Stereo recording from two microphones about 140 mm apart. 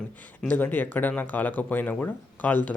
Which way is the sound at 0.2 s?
10° left (ahead or behind).